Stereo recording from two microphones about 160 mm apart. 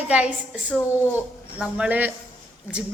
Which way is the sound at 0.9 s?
15° left (ahead or behind).